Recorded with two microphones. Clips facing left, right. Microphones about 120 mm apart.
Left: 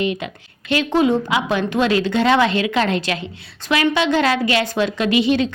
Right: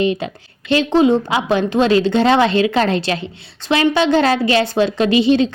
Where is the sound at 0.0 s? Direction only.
30° right (ahead or behind).